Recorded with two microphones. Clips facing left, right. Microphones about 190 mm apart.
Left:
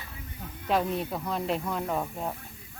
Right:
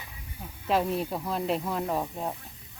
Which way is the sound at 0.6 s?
5° right (ahead or behind).